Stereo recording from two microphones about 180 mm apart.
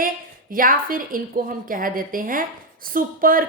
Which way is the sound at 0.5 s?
50° right (ahead or behind).